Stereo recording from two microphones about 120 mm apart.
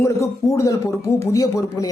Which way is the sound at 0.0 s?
25° left (ahead or behind).